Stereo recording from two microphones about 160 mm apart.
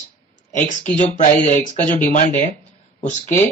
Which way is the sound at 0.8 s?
50° left (ahead or behind).